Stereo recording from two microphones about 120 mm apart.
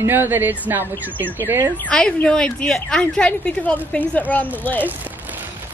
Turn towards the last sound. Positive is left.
turn(degrees=15)  # may be behind; listen again after turning